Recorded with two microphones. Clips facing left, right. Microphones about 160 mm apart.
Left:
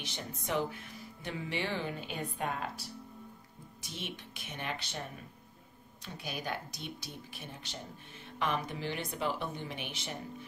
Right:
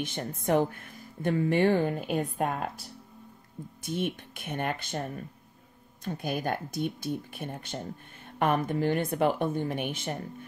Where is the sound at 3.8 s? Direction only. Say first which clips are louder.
Right 12 dB; 50° right (ahead or behind).